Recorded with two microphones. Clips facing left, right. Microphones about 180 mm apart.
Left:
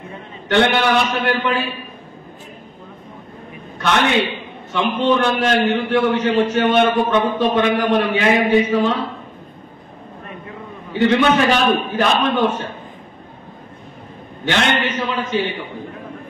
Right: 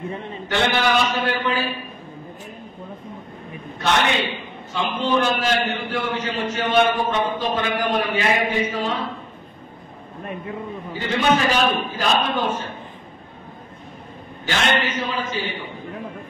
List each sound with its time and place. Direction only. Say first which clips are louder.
0.5 s a man's voice: left 5 dB; 65° left (ahead or behind)
4.7 s a man's voice: left 4 dB; 65° left (ahead or behind)
10.9 s a man's voice: left 6 dB; 70° left (ahead or behind)
14.4 s a man's voice: left 3 dB; 65° left (ahead or behind)